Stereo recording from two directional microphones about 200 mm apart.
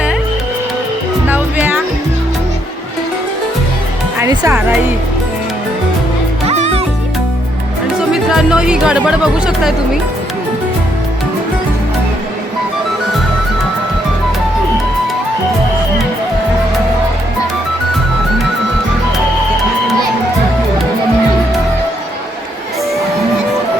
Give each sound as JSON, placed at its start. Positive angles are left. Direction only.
{"t": 1.3, "sound": "music", "side_deg": -10}
{"t": 4.2, "sound": "speech", "side_deg": -15}
{"t": 6.5, "sound": "music", "side_deg": -35}
{"t": 7.9, "sound": "speech", "side_deg": 0}